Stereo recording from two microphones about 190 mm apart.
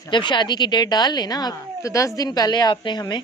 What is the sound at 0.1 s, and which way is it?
Speech, 25° left (ahead or behind).